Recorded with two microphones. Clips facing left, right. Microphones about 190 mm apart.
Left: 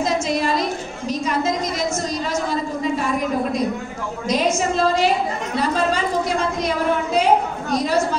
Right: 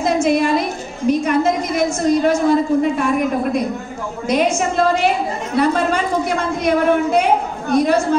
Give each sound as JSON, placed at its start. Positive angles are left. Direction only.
{"t": 0.0, "sound": "a woman's voice", "side_deg": -60}
{"t": 4.3, "sound": "a woman's voice", "side_deg": -55}
{"t": 6.6, "sound": "a woman's voice", "side_deg": -55}